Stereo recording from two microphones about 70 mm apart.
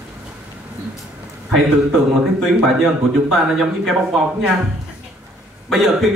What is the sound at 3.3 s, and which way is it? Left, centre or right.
Speech, centre.